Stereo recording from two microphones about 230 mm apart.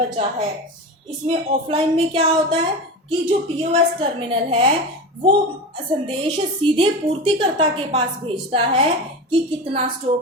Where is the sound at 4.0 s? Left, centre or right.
Right.